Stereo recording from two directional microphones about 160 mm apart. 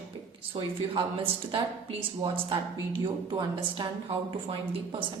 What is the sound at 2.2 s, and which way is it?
A woman's voice, 30° right (ahead or behind).